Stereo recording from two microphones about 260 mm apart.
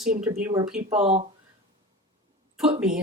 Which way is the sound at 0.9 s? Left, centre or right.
Right.